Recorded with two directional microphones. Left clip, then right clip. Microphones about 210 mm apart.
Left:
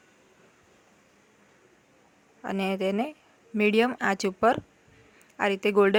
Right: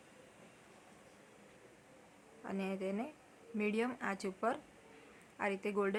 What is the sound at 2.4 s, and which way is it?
Speech, 45° left (ahead or behind).